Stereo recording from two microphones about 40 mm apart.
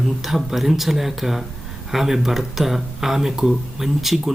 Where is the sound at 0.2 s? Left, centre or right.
Centre.